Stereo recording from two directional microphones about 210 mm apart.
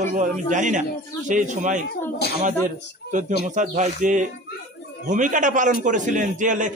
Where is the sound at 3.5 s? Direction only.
35° right (ahead or behind).